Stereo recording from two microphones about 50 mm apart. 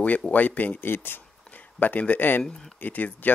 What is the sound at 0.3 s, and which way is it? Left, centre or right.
Speech, left.